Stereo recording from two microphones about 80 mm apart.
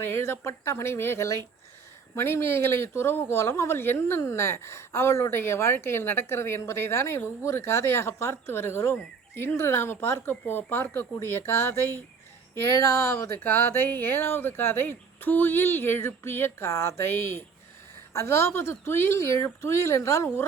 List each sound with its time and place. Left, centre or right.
0.0 s speech: left